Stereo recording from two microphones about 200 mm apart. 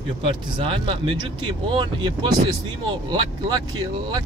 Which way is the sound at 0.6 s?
25° right (ahead or behind).